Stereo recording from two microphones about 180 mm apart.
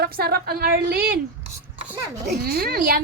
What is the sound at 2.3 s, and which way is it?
Speech, 60° right (ahead or behind).